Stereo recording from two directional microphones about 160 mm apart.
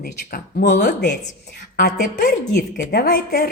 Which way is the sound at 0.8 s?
90° left.